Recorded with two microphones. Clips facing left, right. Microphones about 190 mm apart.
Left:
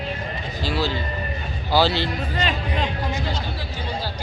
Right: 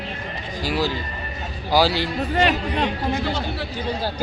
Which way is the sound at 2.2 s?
65° right (ahead or behind).